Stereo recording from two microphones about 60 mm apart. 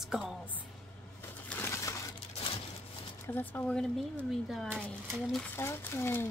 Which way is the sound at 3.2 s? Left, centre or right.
Left.